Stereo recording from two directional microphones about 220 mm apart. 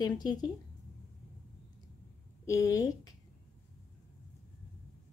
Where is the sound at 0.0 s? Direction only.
20° left (ahead or behind).